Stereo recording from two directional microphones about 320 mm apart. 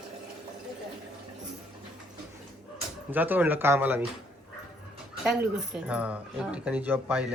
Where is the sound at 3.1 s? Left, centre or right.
Centre.